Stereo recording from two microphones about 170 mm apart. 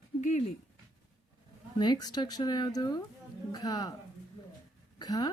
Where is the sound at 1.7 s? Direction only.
25° left (ahead or behind).